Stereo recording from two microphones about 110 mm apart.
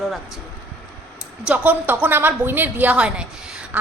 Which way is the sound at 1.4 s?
10° right (ahead or behind).